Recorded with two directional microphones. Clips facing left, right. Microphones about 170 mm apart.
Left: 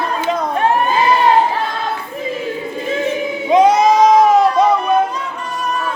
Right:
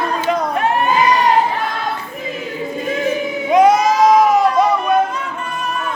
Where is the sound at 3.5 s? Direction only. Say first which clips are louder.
Left 1 dB; 25° left (ahead or behind).